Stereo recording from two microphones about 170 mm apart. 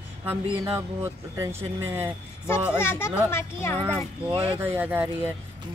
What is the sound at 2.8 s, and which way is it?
Speech, 15° left (ahead or behind).